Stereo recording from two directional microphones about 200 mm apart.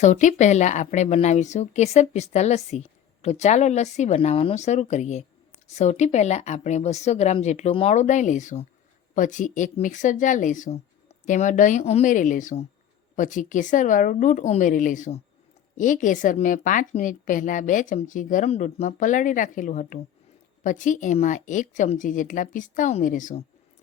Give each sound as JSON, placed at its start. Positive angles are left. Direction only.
{"t": 0.0, "sound": "speech", "side_deg": 35}